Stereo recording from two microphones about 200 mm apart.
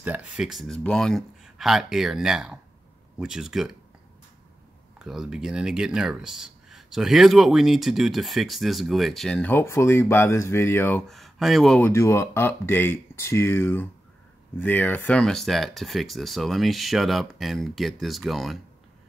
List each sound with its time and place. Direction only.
0.0 s speech: 5° right (ahead or behind)
4.9 s speech: centre (ahead or behind)
11.9 s speech: 15° left (ahead or behind)